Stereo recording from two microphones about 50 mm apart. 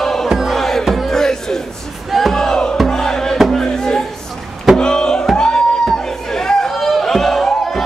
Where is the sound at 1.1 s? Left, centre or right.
Centre.